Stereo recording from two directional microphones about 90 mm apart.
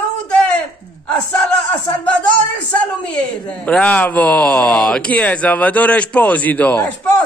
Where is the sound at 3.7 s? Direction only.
15° left (ahead or behind).